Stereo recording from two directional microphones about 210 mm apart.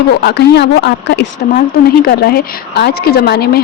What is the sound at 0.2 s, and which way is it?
A woman's voice, 50° left (ahead or behind).